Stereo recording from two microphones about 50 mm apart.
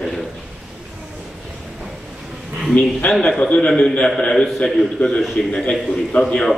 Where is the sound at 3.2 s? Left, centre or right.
Centre.